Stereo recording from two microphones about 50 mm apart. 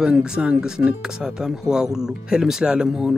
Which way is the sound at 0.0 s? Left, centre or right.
Centre.